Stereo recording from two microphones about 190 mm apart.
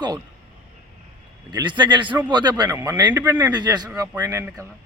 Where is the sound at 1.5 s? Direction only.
25° right (ahead or behind).